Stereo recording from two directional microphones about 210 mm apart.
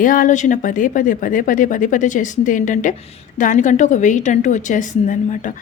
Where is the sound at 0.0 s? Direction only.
40° left (ahead or behind).